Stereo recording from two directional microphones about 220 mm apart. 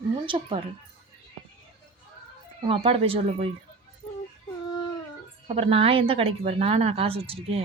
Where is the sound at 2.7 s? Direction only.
25° right (ahead or behind).